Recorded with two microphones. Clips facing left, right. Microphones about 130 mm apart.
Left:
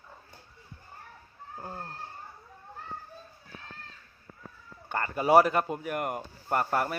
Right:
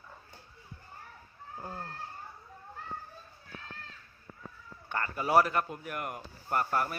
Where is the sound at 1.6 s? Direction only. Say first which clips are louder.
Left 1 dB; 20° left (ahead or behind).